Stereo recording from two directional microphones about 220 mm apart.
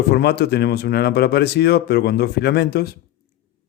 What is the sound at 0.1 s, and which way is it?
Speech, 50° left (ahead or behind).